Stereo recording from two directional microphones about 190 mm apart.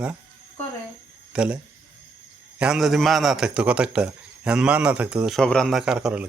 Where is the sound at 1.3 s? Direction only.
5° right (ahead or behind).